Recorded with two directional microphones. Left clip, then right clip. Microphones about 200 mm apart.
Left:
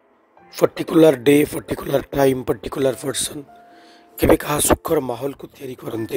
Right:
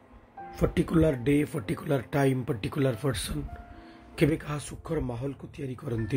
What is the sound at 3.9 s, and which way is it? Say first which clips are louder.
Speech: left 11 dB; 60° left (ahead or behind).